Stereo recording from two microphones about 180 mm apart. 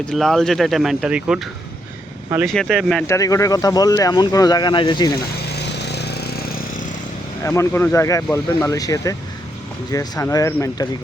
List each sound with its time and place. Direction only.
0.1 s speech: centre (ahead or behind)
2.5 s speech: centre (ahead or behind)
3.1 s speech: 20° left (ahead or behind)
5.5 s vehicle: 65° left (ahead or behind); by 6.9 s 50° left (ahead or behind)
7.4 s speech: 15° left (ahead or behind)